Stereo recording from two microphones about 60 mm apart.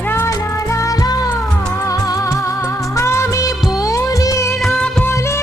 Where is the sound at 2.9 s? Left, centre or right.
Left.